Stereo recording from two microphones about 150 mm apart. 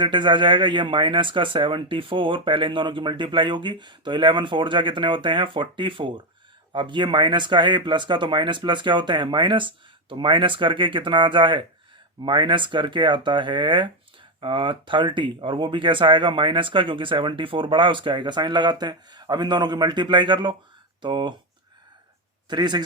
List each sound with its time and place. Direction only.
0.0 s speech: 30° right (ahead or behind)
22.4 s speech: 30° right (ahead or behind)